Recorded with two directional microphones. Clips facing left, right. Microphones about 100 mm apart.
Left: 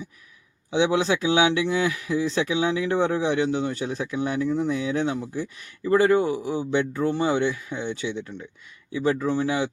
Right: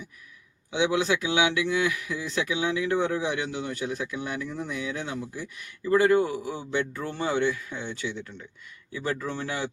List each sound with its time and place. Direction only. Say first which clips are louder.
0.7 s speech: left 3 dB; 30° left (ahead or behind)